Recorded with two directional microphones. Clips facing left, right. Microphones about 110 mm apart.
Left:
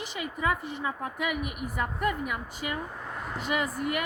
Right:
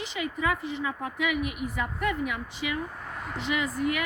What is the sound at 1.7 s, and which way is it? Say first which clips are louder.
Speech: left 3 dB; 5° left (ahead or behind).